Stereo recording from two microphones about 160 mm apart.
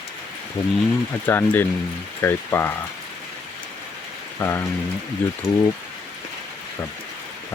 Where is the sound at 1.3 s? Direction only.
15° left (ahead or behind).